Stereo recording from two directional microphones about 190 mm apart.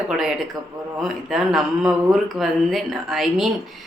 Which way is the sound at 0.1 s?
Centre (ahead or behind).